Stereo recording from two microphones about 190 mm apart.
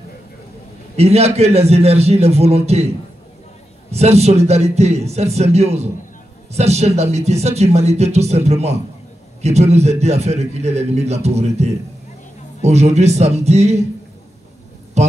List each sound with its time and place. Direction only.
0.9 s a man's voice: 35° right (ahead or behind)
3.9 s a man's voice: 35° right (ahead or behind)
15.0 s a sound: 35° right (ahead or behind)